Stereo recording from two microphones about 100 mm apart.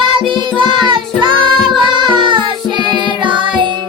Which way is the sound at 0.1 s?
55° right (ahead or behind).